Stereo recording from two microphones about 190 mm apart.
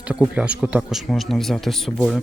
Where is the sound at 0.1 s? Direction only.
5° right (ahead or behind).